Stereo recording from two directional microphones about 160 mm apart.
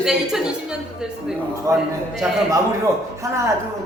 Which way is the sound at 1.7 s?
20° right (ahead or behind).